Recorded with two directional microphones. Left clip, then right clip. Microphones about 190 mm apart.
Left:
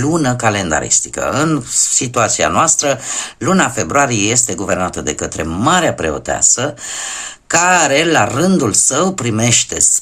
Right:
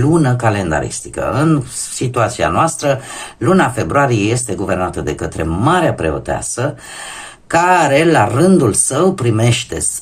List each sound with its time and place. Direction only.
0.0 s speech: 25° left (ahead or behind)